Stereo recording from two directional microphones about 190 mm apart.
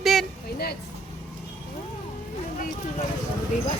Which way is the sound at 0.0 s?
Centre (ahead or behind).